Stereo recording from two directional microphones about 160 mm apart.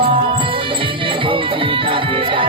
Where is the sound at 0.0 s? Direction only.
35° right (ahead or behind).